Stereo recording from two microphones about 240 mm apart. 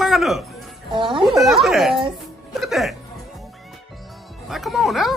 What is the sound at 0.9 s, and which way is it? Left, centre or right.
Speech, centre.